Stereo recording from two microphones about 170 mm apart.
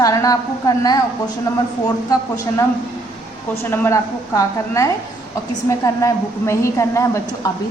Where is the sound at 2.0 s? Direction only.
20° left (ahead or behind).